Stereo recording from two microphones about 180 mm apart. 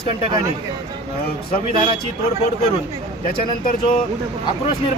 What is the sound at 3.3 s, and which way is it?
Speech, 55° left (ahead or behind).